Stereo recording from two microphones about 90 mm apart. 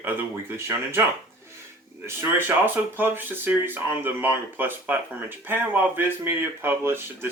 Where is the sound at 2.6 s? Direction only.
25° right (ahead or behind).